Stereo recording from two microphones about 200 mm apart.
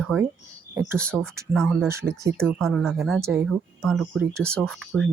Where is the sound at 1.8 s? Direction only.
15° right (ahead or behind).